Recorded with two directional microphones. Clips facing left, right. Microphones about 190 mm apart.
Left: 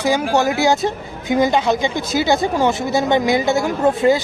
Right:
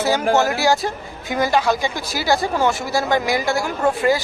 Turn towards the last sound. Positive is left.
turn(degrees=20)  # may be behind; listen again after turning